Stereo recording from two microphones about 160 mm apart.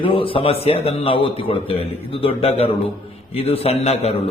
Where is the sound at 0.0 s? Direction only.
35° left (ahead or behind).